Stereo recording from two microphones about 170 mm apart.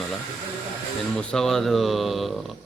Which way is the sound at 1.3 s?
Centre (ahead or behind).